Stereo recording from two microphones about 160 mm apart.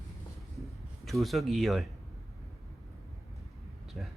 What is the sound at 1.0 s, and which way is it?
Speech, centre (ahead or behind).